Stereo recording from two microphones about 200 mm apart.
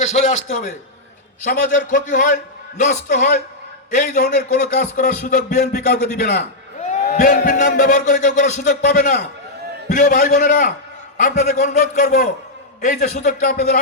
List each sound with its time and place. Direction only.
0.0 s speech: 35° left (ahead or behind)
1.5 s a man's voice: 40° left (ahead or behind)
11.5 s a man's voice: 35° left (ahead or behind)